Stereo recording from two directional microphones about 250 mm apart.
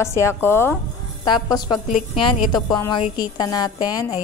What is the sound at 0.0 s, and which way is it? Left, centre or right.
A woman's voice, centre.